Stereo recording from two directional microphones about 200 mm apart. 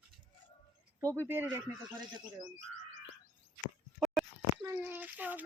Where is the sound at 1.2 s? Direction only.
10° right (ahead or behind).